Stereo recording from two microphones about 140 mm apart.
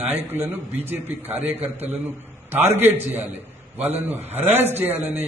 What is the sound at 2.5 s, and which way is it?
Speech, 15° right (ahead or behind).